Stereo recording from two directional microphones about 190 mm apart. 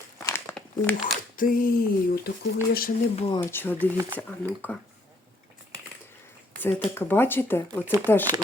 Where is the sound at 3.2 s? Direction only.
25° left (ahead or behind).